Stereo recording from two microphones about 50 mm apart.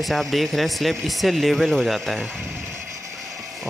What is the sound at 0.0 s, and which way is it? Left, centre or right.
Speech, centre.